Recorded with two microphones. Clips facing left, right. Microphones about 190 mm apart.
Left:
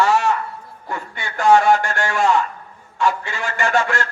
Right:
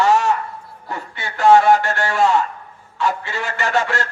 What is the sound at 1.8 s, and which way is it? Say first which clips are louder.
Speech: right 1 dB; 45° left (ahead or behind).